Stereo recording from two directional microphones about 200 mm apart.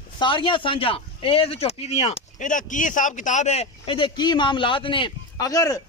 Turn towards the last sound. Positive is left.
turn(degrees=15)  # may be behind; listen again after turning